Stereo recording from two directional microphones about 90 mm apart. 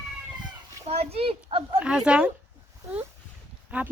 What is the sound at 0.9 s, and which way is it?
Speech, 90° right.